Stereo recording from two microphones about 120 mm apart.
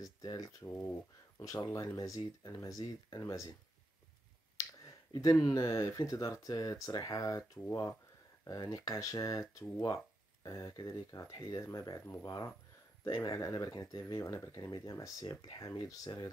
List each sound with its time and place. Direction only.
0.2 s speech: 35° left (ahead or behind)
4.8 s speech: 30° left (ahead or behind)